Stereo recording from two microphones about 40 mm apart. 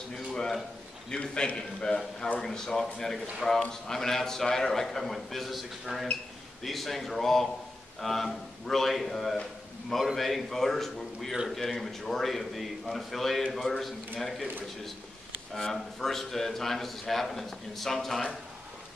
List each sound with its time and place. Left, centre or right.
0.1 s a sound: centre
1.1 s a man's voice: centre
3.4 s a man's voice: centre
3.8 s a man's voice: centre
15.5 s a man's voice: centre